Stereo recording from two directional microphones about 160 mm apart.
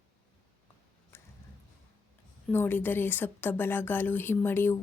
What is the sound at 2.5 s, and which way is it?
Speech, 10° left (ahead or behind).